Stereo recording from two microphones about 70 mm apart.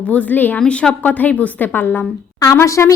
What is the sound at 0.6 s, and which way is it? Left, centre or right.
A woman's voice, centre.